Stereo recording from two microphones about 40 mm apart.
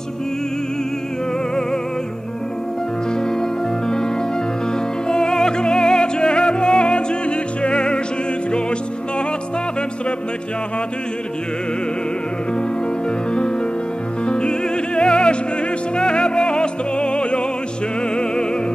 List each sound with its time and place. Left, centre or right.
5.0 s music: centre
14.2 s opera: left
15.0 s music: left